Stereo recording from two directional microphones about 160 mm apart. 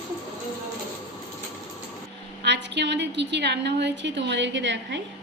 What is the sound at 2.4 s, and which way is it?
A woman's voice, 90° right.